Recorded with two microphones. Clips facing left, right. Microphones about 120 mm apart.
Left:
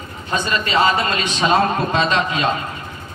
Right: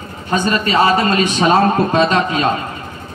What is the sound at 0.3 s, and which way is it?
A man's voice, 35° right (ahead or behind).